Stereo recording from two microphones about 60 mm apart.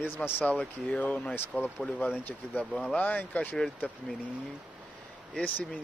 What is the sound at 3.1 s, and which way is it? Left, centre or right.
Speech, left.